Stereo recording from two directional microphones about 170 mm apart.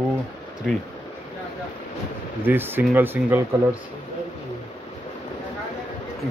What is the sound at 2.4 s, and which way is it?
Speech, 10° right (ahead or behind).